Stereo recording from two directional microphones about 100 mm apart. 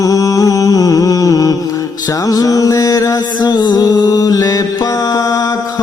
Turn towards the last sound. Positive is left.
turn(degrees=40)  # may be behind; listen again after turning